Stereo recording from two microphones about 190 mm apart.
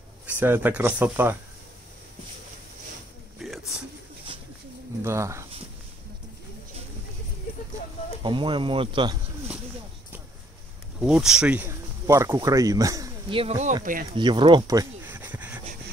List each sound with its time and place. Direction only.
0.4 s speech: 10° right (ahead or behind)
3.3 s a sound: centre (ahead or behind)
5.0 s speech: 15° right (ahead or behind)
8.2 s speech: 25° right (ahead or behind)
11.0 s speech: 5° right (ahead or behind); by 13.7 s 35° right (ahead or behind)
14.1 s a sound: 25° right (ahead or behind); by 15.6 s 10° right (ahead or behind)